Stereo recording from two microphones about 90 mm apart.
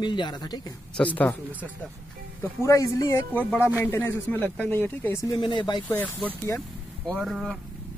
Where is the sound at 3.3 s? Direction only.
20° left (ahead or behind).